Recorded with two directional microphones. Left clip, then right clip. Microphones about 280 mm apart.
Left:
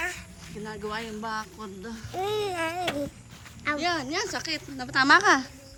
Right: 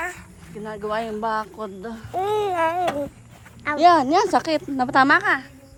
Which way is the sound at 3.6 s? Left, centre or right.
Centre.